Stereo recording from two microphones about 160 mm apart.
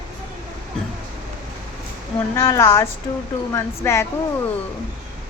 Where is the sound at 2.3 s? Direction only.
20° left (ahead or behind).